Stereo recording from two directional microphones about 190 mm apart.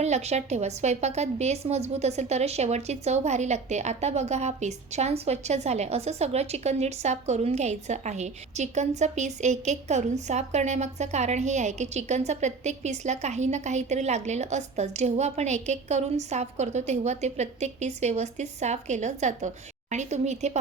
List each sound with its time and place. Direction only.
0.0 s a woman's voice: 35° right (ahead or behind)